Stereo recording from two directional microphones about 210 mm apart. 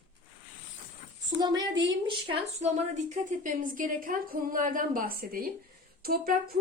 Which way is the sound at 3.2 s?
40° right (ahead or behind).